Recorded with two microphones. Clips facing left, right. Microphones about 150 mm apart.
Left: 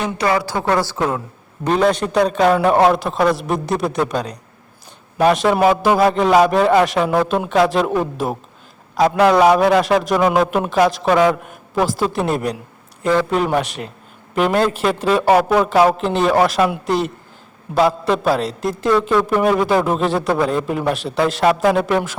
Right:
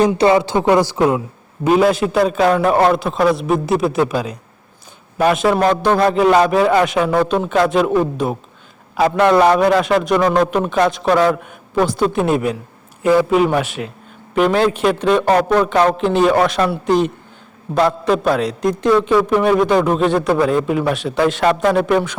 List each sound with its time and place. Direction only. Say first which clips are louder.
0.2 s a woman's voice: right 5 dB; 25° right (ahead or behind); by 22.2 s centre (ahead or behind)